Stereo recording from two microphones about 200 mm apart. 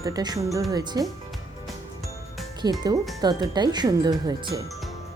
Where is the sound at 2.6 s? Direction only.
20° right (ahead or behind).